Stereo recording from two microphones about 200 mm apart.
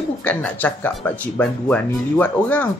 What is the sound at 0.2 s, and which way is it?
Speech, 5° left (ahead or behind).